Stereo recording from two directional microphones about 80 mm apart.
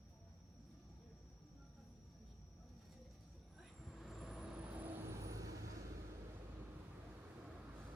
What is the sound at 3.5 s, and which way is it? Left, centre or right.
Vehicle, centre.